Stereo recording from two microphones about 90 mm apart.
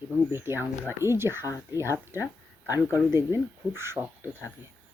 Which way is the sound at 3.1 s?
30° right (ahead or behind).